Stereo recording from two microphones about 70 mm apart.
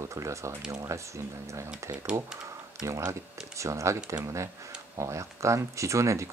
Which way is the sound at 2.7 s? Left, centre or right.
Right.